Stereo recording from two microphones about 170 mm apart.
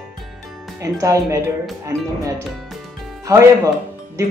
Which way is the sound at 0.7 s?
20° right (ahead or behind).